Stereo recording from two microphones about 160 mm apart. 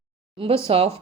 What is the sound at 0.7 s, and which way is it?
Speech, 35° right (ahead or behind).